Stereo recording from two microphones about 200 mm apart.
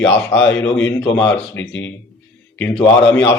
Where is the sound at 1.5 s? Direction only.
65° left (ahead or behind).